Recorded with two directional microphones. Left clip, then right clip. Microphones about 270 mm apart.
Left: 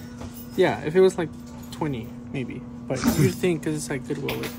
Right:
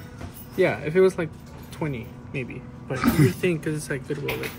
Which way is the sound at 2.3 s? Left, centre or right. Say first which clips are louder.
Right 1 dB; left.